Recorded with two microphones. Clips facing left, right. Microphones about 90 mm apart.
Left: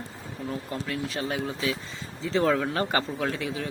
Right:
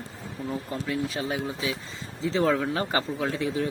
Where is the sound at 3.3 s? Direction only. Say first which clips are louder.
Right 4 dB; 30° right (ahead or behind).